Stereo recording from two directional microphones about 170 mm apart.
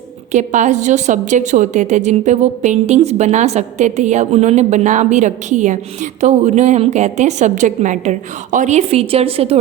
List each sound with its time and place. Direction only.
0.3 s a woman's voice: 45° right (ahead or behind)